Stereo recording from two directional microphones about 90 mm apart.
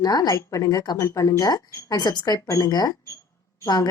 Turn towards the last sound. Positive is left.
turn(degrees=45)  # may be behind; listen again after turning